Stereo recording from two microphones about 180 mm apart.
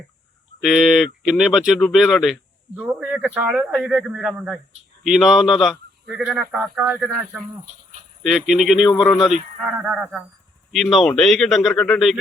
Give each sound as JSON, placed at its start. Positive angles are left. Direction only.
{"t": 0.6, "sound": "speech", "side_deg": 0}